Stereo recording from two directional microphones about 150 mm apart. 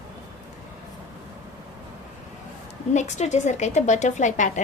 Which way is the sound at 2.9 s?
50° left (ahead or behind).